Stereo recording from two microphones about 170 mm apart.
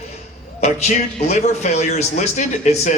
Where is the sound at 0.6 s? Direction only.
40° left (ahead or behind).